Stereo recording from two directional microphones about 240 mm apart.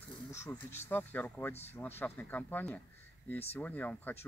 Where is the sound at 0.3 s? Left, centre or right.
Centre.